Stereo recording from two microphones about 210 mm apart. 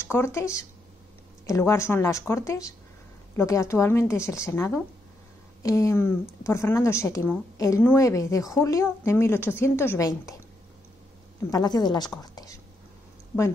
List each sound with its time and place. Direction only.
0.0 s speech: 10° left (ahead or behind)
11.5 s a woman's voice: 20° left (ahead or behind)